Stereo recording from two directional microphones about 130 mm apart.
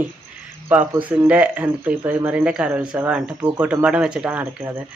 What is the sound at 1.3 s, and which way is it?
Speech, 10° right (ahead or behind).